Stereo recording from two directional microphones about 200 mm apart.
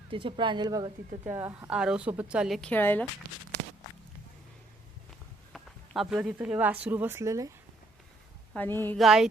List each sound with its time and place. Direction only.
0.1 s speech: 25° right (ahead or behind)
1.2 s a woman's voice: 10° right (ahead or behind); by 3.1 s 10° left (ahead or behind)
5.5 s a sound: centre (ahead or behind)
6.1 s speech: 5° right (ahead or behind)
8.5 s speech: 10° left (ahead or behind)
9.0 s a woman's voice: centre (ahead or behind)